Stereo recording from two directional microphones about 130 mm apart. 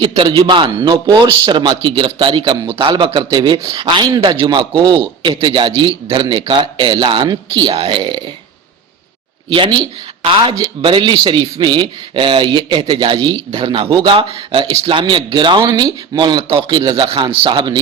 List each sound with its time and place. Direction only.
0.0 s a man's voice: 40° right (ahead or behind)
9.5 s a man's voice: 35° right (ahead or behind)